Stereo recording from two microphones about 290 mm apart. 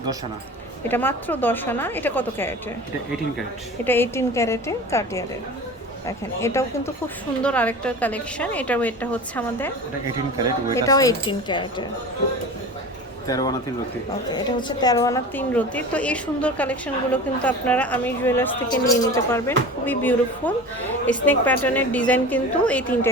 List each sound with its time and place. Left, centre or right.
0.9 s a woman's voice: centre
3.8 s a woman's voice: centre
10.8 s a woman's voice: centre
13.2 s a woman's voice: centre